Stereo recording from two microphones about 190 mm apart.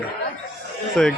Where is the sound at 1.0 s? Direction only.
5° left (ahead or behind).